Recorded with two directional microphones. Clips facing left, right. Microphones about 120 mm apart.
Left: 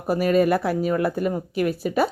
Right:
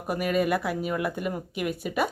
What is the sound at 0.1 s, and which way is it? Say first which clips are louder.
A woman's voice: left 6 dB; 35° left (ahead or behind).